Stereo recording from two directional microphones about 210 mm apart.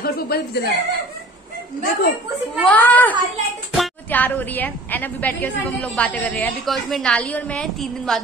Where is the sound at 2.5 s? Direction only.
5° left (ahead or behind).